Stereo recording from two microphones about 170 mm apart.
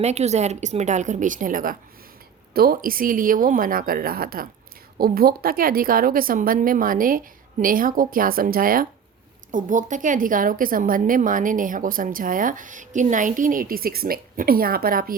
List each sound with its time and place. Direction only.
0.0 s a woman's voice: 40° right (ahead or behind); by 15.1 s 60° right (ahead or behind)